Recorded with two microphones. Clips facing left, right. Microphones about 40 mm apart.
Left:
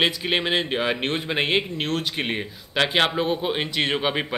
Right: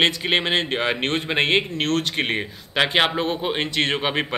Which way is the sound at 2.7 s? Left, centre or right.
Centre.